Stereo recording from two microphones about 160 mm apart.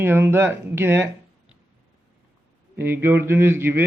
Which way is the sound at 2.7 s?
15° right (ahead or behind).